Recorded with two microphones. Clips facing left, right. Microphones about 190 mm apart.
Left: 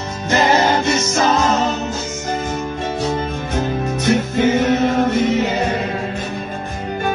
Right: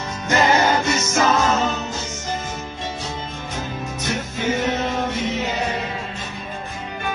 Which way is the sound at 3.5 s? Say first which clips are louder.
Left 9 dB; 60° left (ahead or behind).